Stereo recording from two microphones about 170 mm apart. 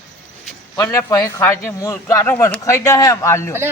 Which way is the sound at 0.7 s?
20° left (ahead or behind).